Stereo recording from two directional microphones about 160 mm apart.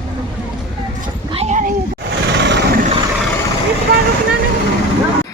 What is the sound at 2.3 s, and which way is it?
Vehicle, 90° right.